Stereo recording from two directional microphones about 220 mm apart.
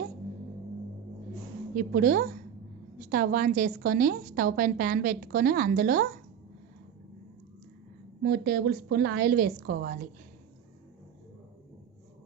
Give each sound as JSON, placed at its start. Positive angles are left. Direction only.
{"t": 1.7, "sound": "a woman's voice", "side_deg": -40}
{"t": 8.2, "sound": "a woman's voice", "side_deg": -45}